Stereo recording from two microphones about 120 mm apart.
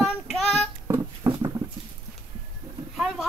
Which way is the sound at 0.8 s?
30° right (ahead or behind).